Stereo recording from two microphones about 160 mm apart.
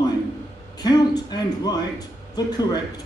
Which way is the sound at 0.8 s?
25° left (ahead or behind).